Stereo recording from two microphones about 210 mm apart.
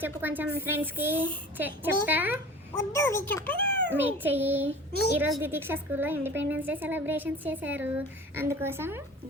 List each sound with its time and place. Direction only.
0.0 s a woman's voice: 10° right (ahead or behind)
2.9 s a child's voice: 10° left (ahead or behind)
3.9 s a woman's voice: 10° right (ahead or behind)